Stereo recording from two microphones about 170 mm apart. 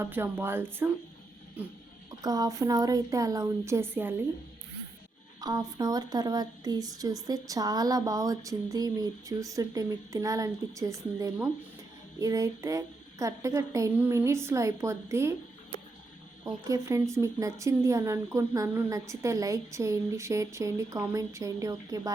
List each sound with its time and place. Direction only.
0.0 s speech: 15° right (ahead or behind)
2.0 s speech: 20° right (ahead or behind)
5.4 s speech: 25° right (ahead or behind)
16.4 s speech: 20° right (ahead or behind)